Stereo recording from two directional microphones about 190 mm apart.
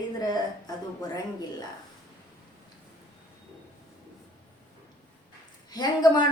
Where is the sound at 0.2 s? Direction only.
20° left (ahead or behind).